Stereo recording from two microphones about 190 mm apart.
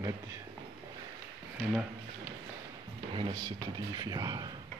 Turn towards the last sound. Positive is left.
turn(degrees=-20)  # may be behind; listen again after turning